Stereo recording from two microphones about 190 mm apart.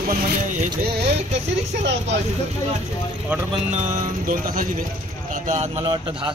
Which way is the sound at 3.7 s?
40° right (ahead or behind).